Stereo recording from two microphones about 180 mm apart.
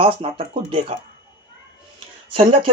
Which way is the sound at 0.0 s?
30° right (ahead or behind).